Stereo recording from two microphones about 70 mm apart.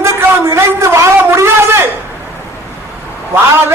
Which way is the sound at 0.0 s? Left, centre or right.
Right.